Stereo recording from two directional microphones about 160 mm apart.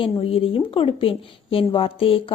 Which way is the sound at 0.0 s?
35° left (ahead or behind).